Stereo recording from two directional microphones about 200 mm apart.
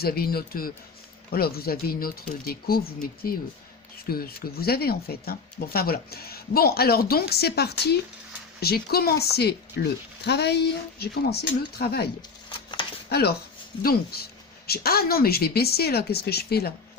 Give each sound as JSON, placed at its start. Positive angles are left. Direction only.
{"t": 0.0, "sound": "speech", "side_deg": 50}
{"t": 13.1, "sound": "speech", "side_deg": 55}
{"t": 14.7, "sound": "speech", "side_deg": 50}